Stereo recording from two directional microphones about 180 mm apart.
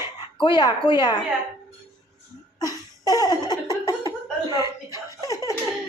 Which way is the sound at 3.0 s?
20° left (ahead or behind).